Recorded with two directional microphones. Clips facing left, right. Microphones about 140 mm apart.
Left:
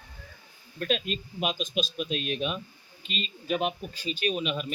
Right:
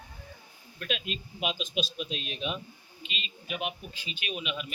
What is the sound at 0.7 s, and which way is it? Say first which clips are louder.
Speech: left 6 dB; 40° left (ahead or behind).